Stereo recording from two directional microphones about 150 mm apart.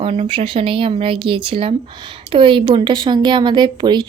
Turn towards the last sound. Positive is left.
turn(degrees=-30)  # may be behind; listen again after turning